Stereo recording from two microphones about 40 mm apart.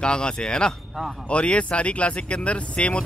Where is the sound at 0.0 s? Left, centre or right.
Left.